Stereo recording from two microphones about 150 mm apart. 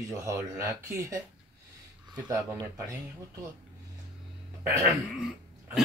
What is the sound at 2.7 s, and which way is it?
Speech, 20° right (ahead or behind).